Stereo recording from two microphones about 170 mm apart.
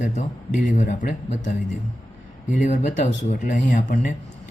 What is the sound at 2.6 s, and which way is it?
Speech, 45° left (ahead or behind).